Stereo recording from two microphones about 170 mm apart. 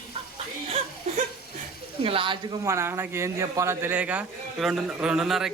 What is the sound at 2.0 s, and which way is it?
Speech, 30° right (ahead or behind).